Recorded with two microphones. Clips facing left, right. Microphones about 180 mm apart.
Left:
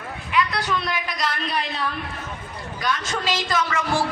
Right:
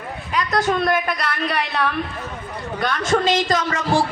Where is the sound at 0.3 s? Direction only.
45° right (ahead or behind); by 1.9 s 65° right (ahead or behind).